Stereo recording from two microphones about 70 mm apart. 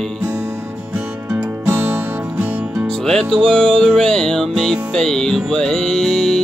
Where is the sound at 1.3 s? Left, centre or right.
Right.